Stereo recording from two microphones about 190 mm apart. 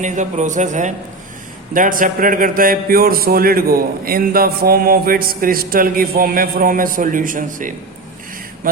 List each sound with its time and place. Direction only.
0.0 s a man's voice: 40° right (ahead or behind)